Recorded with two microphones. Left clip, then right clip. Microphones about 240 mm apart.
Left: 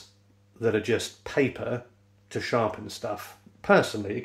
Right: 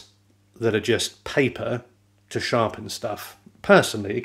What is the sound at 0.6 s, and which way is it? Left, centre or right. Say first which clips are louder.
Speech: right 3 dB; right.